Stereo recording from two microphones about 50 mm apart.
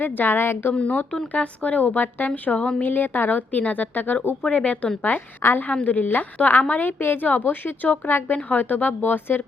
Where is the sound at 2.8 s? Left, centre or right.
Left.